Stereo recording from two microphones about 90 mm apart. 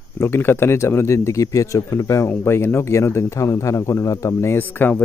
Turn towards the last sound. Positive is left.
turn(degrees=20)  # may be behind; listen again after turning